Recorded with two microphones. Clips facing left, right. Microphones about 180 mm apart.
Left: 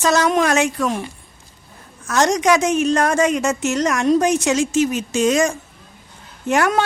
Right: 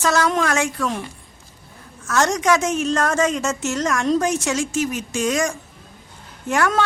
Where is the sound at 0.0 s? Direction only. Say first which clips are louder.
Left 3 dB; 20° left (ahead or behind).